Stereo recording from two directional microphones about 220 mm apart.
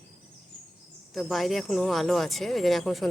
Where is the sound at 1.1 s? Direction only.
Centre (ahead or behind).